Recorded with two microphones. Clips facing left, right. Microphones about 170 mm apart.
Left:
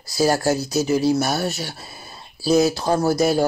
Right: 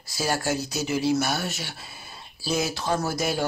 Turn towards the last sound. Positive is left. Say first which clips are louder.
# left 8 dB
turn(degrees=40)  # may be behind; listen again after turning